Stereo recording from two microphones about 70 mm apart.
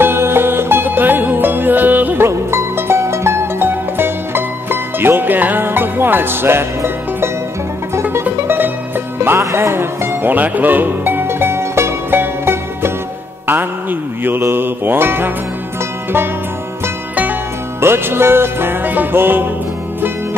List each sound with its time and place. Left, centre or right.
0.0 s music: right
2.2 s music: right
7.9 s music: right
9.4 s music: right
17.1 s music: right
17.7 s music: right